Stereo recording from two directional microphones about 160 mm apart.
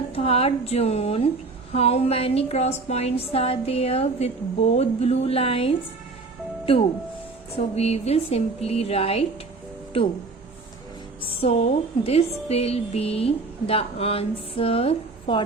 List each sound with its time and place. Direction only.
0.1 s a woman's voice: 40° left (ahead or behind)
7.5 s a woman's voice: 40° left (ahead or behind)
11.2 s a woman's voice: 35° left (ahead or behind)